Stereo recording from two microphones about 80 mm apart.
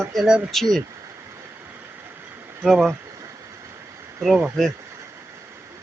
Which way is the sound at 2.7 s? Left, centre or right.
Centre.